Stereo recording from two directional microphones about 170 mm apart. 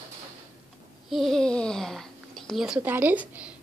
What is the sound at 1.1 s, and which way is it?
A woman's voice, centre (ahead or behind).